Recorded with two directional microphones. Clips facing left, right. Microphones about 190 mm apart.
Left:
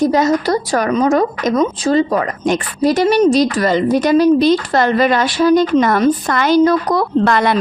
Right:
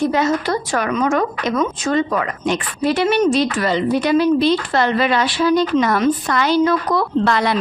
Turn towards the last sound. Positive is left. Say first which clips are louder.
# left 3 dB
turn(degrees=50)  # may be behind; listen again after turning